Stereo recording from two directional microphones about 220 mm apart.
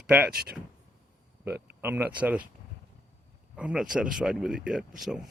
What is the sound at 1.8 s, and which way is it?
Speech, 10° right (ahead or behind).